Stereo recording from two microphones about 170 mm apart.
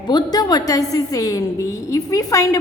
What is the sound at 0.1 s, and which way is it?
A woman's voice, 25° left (ahead or behind).